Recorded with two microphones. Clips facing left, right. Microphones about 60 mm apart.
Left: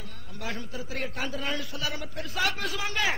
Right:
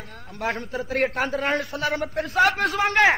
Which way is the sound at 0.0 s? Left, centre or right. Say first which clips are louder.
Right 9 dB; right.